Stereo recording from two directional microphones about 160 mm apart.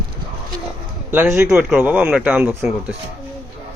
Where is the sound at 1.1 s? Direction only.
10° right (ahead or behind).